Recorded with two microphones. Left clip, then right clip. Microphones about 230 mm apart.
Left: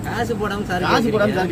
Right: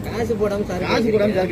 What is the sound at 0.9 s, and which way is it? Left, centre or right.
Speech, left.